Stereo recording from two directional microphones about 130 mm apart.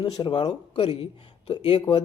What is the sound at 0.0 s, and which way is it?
Speech, 40° left (ahead or behind).